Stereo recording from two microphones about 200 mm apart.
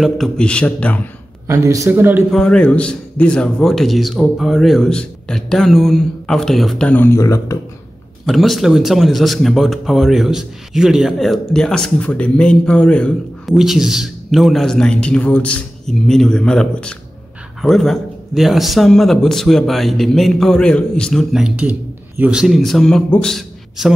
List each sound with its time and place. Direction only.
0.0 s speech: centre (ahead or behind)
1.5 s speech: 15° right (ahead or behind)
2.3 s speech: 5° left (ahead or behind)
8.3 s a man's voice: centre (ahead or behind)